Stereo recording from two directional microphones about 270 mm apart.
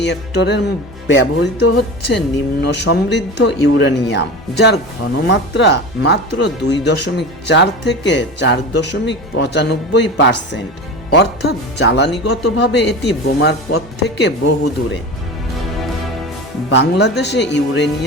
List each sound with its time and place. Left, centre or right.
0.0 s speech: left
16.6 s speech: left